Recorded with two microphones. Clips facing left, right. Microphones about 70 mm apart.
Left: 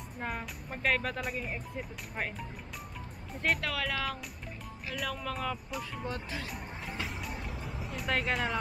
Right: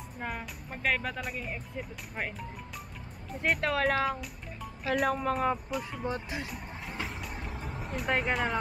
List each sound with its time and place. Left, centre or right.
0.2 s speech: centre
3.6 s speech: right
4.8 s speech: right
6.0 s speech: right
6.4 s vehicle: centre
7.7 s music: centre
8.2 s speech: centre